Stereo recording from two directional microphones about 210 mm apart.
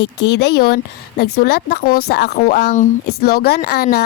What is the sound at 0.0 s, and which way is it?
Speech, 55° left (ahead or behind).